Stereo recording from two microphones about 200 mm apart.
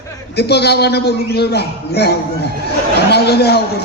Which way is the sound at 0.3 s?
55° left (ahead or behind).